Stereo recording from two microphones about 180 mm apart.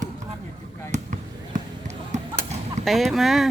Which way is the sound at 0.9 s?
40° right (ahead or behind).